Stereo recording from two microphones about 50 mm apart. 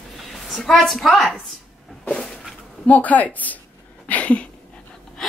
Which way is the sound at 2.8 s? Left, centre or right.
Left.